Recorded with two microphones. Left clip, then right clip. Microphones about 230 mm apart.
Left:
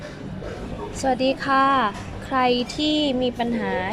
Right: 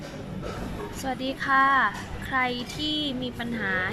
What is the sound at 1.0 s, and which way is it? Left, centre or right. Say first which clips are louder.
A woman's voice: left 8 dB; centre.